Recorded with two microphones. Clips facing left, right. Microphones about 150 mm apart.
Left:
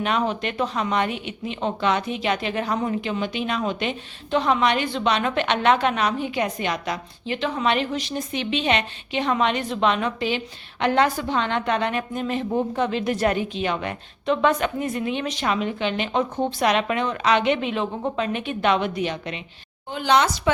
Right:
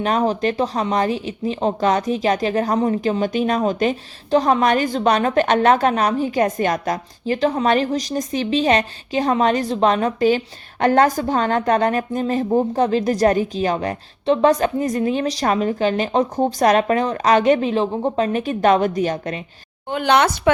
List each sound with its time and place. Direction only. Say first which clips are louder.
0.0 s speech: right 5 dB; 35° right (ahead or behind)
19.9 s speech: right 3 dB; 60° right (ahead or behind)